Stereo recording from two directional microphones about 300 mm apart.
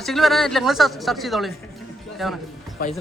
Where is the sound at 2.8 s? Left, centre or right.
Left.